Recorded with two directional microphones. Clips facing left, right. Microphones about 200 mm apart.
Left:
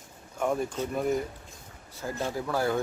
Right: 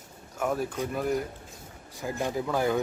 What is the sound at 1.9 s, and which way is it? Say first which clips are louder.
Speech: right 2 dB; 15° right (ahead or behind).